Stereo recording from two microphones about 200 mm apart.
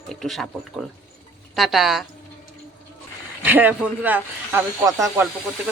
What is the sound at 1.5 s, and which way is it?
Speech, centre (ahead or behind).